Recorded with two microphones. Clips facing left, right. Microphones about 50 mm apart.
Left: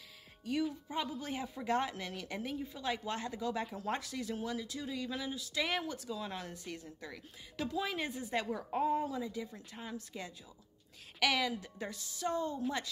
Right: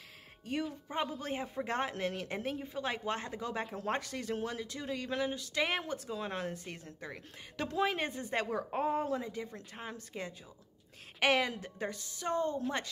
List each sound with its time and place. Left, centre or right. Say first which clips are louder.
0.5 s a man's voice: left 2 dB; right
7.5 s speech: right 4 dB; right